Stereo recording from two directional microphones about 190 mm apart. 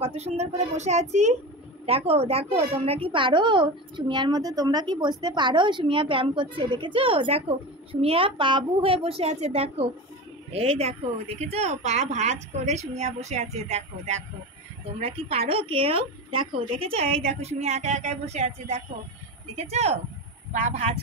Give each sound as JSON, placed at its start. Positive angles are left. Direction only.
{"t": 0.0, "sound": "a woman's voice", "side_deg": -35}